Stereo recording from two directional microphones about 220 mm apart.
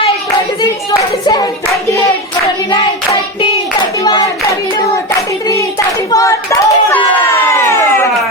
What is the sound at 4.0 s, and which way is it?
Hands, 15° left (ahead or behind).